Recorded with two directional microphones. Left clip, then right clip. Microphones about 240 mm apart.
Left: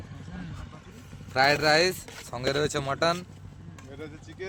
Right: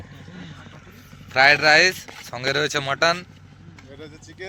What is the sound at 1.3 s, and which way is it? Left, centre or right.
A man's voice, centre.